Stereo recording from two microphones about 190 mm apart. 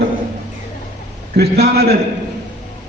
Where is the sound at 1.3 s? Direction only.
60° right (ahead or behind).